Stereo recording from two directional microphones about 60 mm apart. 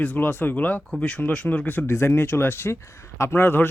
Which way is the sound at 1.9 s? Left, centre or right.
Left.